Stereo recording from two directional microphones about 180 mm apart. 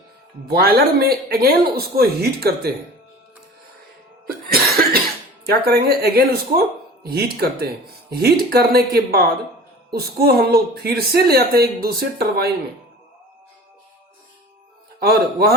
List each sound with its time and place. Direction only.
0.4 s a woman's voice: 60° right (ahead or behind)
4.3 s cough: 55° right (ahead or behind)
5.6 s a woman's voice: 60° right (ahead or behind)
15.0 s a woman's voice: 60° right (ahead or behind)